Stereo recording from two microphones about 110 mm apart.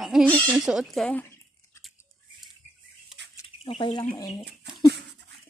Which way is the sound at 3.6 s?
50° left (ahead or behind).